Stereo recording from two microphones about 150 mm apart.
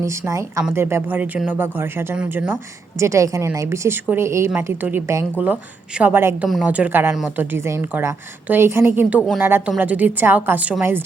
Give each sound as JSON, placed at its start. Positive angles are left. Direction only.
{"t": 0.0, "sound": "speech", "side_deg": -20}